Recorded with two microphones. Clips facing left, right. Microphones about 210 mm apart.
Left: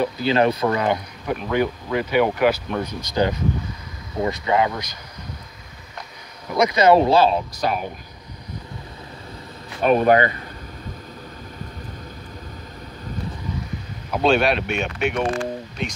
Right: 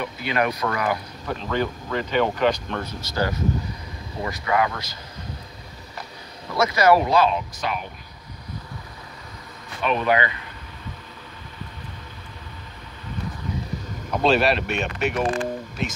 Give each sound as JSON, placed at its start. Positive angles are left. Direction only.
{"t": 0.0, "sound": "speech", "side_deg": 30}
{"t": 1.2, "sound": "speech", "side_deg": 15}
{"t": 6.5, "sound": "speech", "side_deg": 20}
{"t": 9.8, "sound": "speech", "side_deg": 45}
{"t": 14.1, "sound": "speech", "side_deg": 0}